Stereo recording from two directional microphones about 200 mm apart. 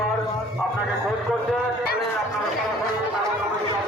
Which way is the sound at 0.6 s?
Centre (ahead or behind).